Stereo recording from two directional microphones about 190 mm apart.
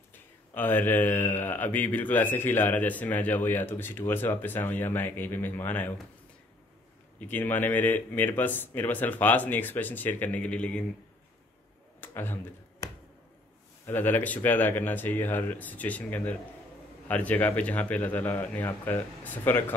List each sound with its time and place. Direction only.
0.6 s speech: 10° left (ahead or behind)
7.2 s speech: 10° left (ahead or behind)
12.0 s a sound: 10° left (ahead or behind)
13.8 s speech: 10° left (ahead or behind)